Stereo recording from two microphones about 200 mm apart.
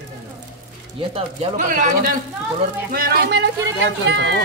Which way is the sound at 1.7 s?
45° right (ahead or behind).